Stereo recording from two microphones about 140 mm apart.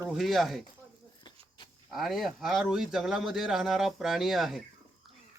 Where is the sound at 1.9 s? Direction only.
Centre (ahead or behind).